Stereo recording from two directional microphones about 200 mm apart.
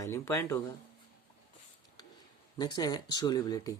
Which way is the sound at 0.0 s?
15° left (ahead or behind).